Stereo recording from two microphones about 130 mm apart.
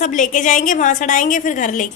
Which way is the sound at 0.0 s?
80° left.